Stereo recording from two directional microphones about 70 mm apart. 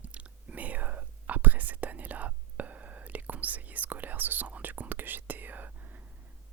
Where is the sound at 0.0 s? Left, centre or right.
Centre.